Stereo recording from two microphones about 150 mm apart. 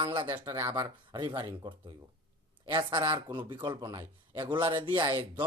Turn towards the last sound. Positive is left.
turn(degrees=-30)  # may be behind; listen again after turning